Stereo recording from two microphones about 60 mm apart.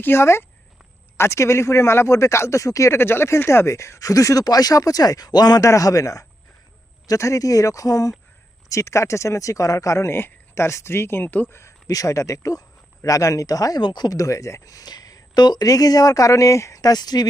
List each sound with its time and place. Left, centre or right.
0.0 s speech: left
3.0 s speech: left
8.7 s speech: left
10.1 s speech: left
11.9 s speech: left